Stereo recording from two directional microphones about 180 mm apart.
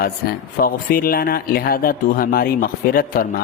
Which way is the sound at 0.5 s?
55° left (ahead or behind).